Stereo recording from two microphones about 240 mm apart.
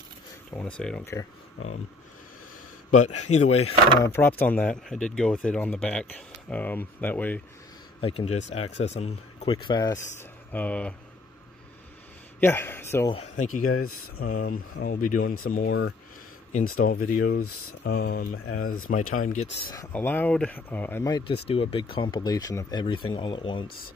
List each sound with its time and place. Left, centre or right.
0.5 s speech: centre
2.9 s a man's voice: left
4.0 s speech: centre
8.0 s speech: left
10.5 s speech: centre
12.4 s speech: centre
13.1 s speech: left
13.8 s speech: left
14.1 s speech: left
16.8 s speech: left
18.3 s speech: left
18.9 s speech: left
19.7 s speech: centre